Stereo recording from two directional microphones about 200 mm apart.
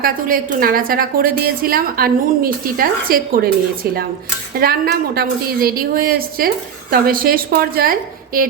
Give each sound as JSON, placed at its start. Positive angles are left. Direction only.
{"t": 0.0, "sound": "a woman's voice", "side_deg": -45}
{"t": 4.6, "sound": "a woman's voice", "side_deg": -50}